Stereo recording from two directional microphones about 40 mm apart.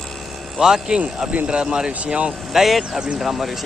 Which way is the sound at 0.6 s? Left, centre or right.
Centre.